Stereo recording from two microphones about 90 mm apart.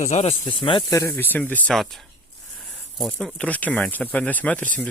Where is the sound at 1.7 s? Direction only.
Centre (ahead or behind).